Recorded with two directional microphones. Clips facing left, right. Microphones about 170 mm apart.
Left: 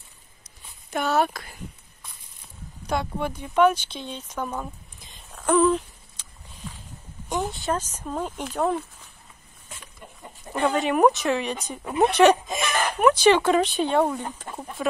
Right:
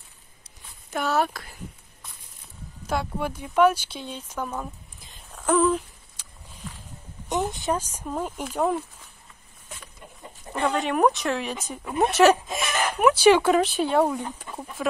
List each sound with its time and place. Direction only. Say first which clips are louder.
0.8 s speech: left 1 dB; centre (ahead or behind)
2.9 s speech: left 1 dB; 5° right (ahead or behind)
5.3 s a sound: left 1 dB; centre (ahead or behind)
7.5 s speech: even; 15° right (ahead or behind)
10.6 s speech: left 2 dB; centre (ahead or behind)
14.5 s chicken: left 1 dB; 50° left (ahead or behind)